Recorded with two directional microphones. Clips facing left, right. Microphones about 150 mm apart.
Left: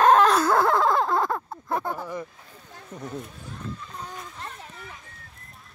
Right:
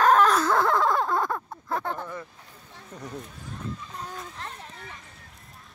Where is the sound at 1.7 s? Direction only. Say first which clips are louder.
Left 2 dB; 10° left (ahead or behind).